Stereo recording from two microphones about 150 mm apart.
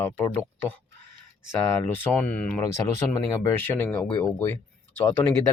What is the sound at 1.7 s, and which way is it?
Speech, 10° left (ahead or behind).